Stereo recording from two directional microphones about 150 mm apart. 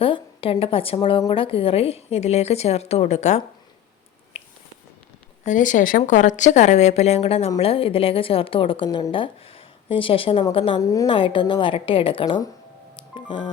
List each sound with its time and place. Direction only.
0.0 s a woman's voice: 40° left (ahead or behind)
5.5 s a woman's voice: 60° left (ahead or behind); by 10.8 s 35° left (ahead or behind)
10.8 s a woman's voice: 20° left (ahead or behind)
11.0 s a woman's voice: 35° left (ahead or behind)
13.0 s music: 30° left (ahead or behind)